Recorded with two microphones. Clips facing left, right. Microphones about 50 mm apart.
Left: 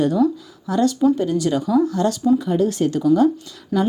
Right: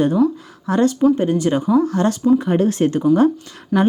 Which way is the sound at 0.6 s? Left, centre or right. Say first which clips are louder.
Right 2 dB; right.